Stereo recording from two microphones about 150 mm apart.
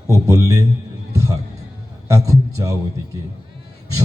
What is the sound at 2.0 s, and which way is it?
Speech, 20° right (ahead or behind).